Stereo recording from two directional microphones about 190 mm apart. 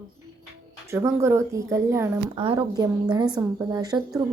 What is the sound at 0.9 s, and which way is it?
Speech, 15° right (ahead or behind).